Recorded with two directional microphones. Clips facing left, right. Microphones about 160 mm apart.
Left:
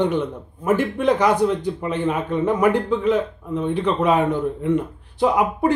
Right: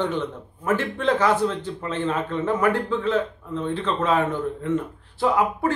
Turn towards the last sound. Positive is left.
turn(degrees=15)  # may be behind; listen again after turning